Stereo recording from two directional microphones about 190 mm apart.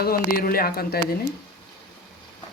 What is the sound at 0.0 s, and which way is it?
Speech, 50° left (ahead or behind).